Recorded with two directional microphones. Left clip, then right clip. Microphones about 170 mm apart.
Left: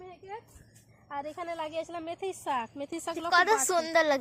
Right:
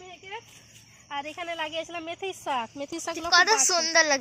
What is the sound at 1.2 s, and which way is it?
Speech, 20° left (ahead or behind).